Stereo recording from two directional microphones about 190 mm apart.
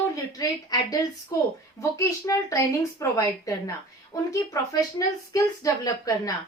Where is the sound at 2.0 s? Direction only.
15° left (ahead or behind).